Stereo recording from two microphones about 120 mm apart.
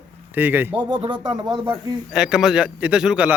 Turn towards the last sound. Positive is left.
turn(degrees=-10)  # may be behind; listen again after turning